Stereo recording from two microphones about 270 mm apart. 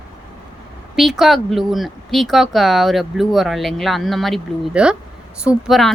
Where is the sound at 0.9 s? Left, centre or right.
Centre.